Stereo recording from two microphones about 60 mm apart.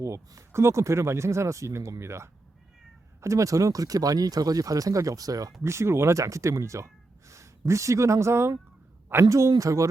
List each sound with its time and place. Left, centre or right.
0.0 s speech: right
5.6 s speech: right
9.3 s speech: right